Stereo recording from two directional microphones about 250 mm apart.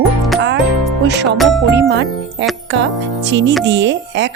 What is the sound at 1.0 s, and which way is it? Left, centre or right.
Speech, right.